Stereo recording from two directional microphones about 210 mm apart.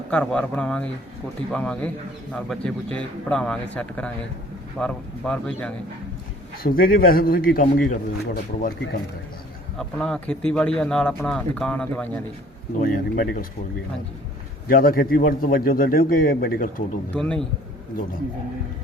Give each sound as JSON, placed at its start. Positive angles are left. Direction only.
{"t": 0.1, "sound": "speech", "side_deg": 5}
{"t": 6.6, "sound": "a man's voice", "side_deg": 45}
{"t": 9.7, "sound": "speech", "side_deg": 0}
{"t": 12.8, "sound": "a man's voice", "side_deg": 45}
{"t": 14.7, "sound": "a man's voice", "side_deg": 45}
{"t": 17.2, "sound": "speech", "side_deg": 5}